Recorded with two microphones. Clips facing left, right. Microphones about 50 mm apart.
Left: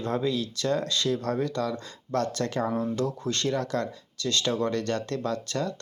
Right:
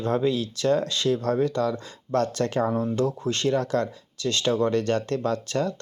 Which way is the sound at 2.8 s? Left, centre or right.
Right.